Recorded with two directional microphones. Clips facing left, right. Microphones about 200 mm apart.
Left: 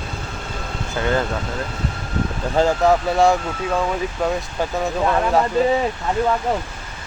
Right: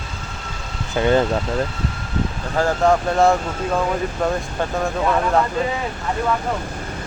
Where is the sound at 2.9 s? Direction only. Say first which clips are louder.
Right 2 dB; centre (ahead or behind).